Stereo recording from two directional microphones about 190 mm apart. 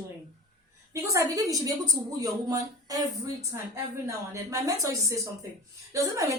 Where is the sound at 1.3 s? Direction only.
20° right (ahead or behind).